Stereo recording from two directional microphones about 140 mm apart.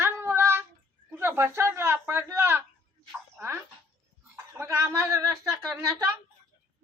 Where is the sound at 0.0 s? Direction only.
20° right (ahead or behind).